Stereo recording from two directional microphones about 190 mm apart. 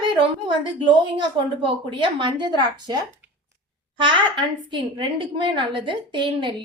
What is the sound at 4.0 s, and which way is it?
A woman's voice, 25° right (ahead or behind).